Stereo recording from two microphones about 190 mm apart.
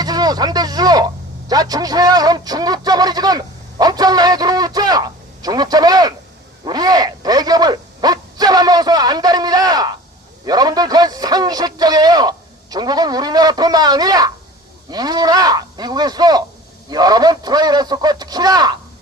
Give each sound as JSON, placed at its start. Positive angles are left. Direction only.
{"t": 0.0, "sound": "a man's voice", "side_deg": -20}